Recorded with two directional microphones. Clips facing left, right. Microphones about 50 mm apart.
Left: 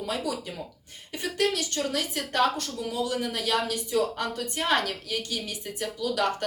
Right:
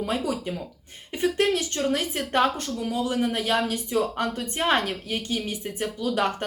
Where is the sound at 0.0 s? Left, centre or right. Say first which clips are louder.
Right 4 dB; right.